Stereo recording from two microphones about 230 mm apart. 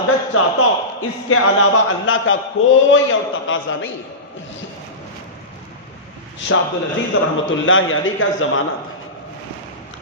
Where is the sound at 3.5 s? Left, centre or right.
Left.